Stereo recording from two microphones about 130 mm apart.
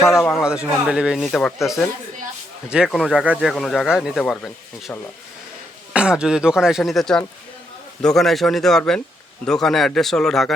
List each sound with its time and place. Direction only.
0.0 s speech: centre (ahead or behind)
2.6 s speech: 5° right (ahead or behind)
5.9 s speech: 10° right (ahead or behind)